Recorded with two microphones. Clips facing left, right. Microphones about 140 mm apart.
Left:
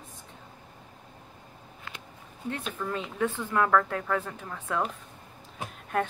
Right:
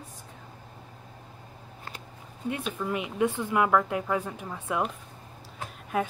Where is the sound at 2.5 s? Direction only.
10° right (ahead or behind).